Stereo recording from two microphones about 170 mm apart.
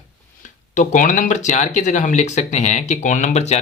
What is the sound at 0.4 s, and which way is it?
Speech, 50° left (ahead or behind).